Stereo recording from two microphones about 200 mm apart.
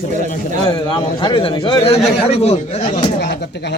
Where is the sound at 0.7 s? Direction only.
25° left (ahead or behind).